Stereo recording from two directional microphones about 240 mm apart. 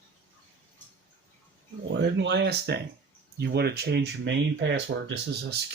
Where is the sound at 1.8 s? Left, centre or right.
Right.